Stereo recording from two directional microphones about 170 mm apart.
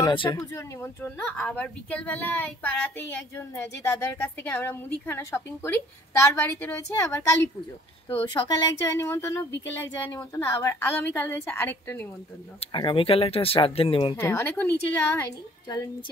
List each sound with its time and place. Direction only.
0.0 s speech: 25° left (ahead or behind)
0.5 s speech: 15° left (ahead or behind)
8.3 s speech: 20° left (ahead or behind)
12.5 s speech: 30° left (ahead or behind)
14.1 s speech: 15° left (ahead or behind)